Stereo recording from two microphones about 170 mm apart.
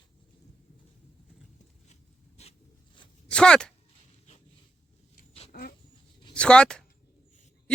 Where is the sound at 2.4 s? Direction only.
30° left (ahead or behind).